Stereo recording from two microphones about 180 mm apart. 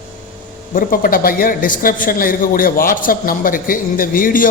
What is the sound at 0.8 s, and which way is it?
A man's voice, 50° left (ahead or behind).